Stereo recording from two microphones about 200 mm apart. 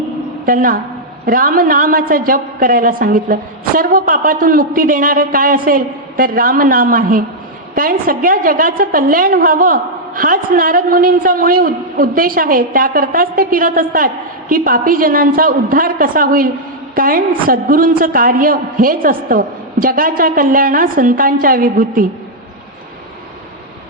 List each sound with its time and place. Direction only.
0.4 s a woman's voice: 45° right (ahead or behind)